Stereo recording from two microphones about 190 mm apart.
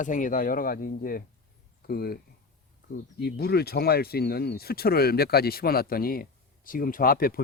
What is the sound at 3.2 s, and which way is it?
Speech, 55° left (ahead or behind).